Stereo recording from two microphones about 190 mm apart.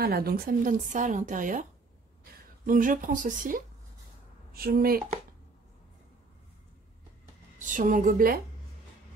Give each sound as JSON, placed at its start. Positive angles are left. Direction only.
{"t": 0.0, "sound": "speech", "side_deg": -55}
{"t": 7.5, "sound": "speech", "side_deg": -45}